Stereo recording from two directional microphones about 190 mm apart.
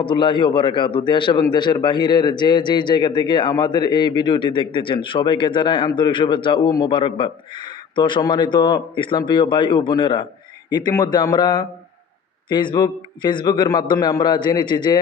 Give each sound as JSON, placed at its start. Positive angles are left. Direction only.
{"t": 0.0, "sound": "a man's voice", "side_deg": 25}